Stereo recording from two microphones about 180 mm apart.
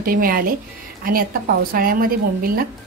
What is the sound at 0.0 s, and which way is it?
Speech, 55° right (ahead or behind).